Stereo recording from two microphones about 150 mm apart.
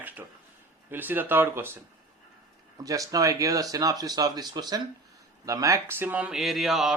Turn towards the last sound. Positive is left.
turn(degrees=0)  # may be behind; listen again after turning